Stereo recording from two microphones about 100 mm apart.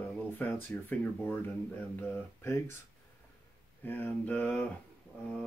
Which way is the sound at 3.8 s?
20° left (ahead or behind).